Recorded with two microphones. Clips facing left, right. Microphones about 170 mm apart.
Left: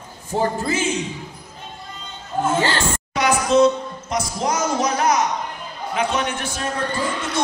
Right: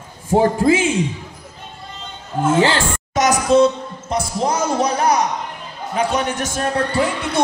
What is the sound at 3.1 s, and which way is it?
Music, 45° right (ahead or behind).